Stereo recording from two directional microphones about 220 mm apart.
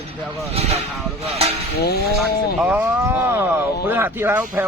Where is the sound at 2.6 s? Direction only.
5° right (ahead or behind).